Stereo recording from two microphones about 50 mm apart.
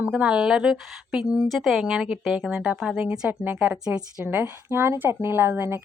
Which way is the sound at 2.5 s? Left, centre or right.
Right.